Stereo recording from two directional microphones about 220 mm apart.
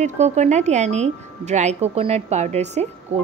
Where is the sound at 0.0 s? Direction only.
30° right (ahead or behind).